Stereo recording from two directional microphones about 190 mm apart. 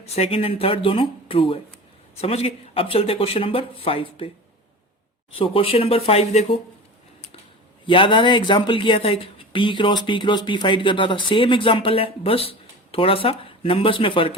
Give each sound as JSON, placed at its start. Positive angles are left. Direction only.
{"t": 0.0, "sound": "speech", "side_deg": 30}
{"t": 5.4, "sound": "speech", "side_deg": 30}
{"t": 7.9, "sound": "speech", "side_deg": 25}